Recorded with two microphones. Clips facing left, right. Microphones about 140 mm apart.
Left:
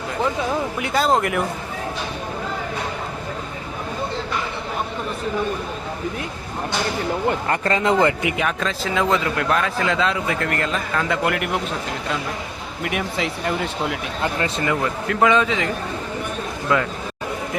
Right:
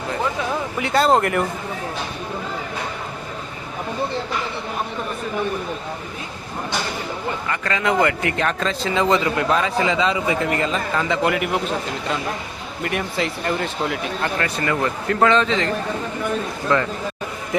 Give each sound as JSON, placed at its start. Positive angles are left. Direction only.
{"t": 0.8, "sound": "speech", "side_deg": 0}
{"t": 7.6, "sound": "speech", "side_deg": 30}
{"t": 12.8, "sound": "speech", "side_deg": 5}
{"t": 14.2, "sound": "speech", "side_deg": 20}
{"t": 15.2, "sound": "a man's voice", "side_deg": 10}
{"t": 16.7, "sound": "a man's voice", "side_deg": 10}